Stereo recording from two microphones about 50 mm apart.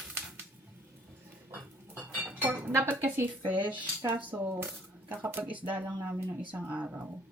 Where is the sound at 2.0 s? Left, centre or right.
Right.